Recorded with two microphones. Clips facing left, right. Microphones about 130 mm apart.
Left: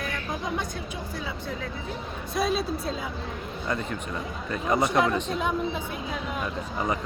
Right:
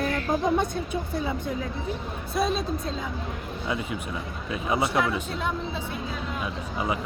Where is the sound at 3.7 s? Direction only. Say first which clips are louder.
Even; 5° right (ahead or behind).